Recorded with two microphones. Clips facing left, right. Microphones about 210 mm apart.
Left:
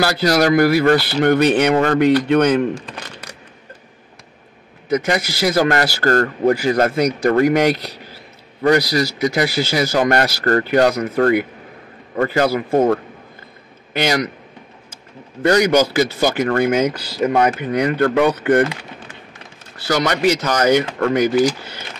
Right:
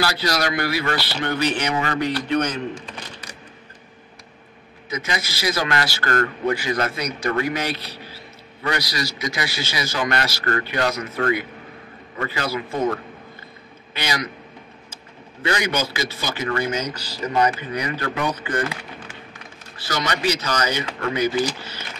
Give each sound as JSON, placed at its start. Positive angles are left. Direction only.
{"t": 0.0, "sound": "a man's voice", "side_deg": 50}
{"t": 5.0, "sound": "a man's voice", "side_deg": 50}
{"t": 9.3, "sound": "a man's voice", "side_deg": 50}
{"t": 15.4, "sound": "a man's voice", "side_deg": 50}
{"t": 20.0, "sound": "a man's voice", "side_deg": 55}